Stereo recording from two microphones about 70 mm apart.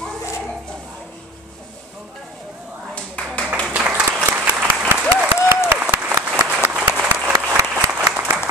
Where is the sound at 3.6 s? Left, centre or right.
Centre.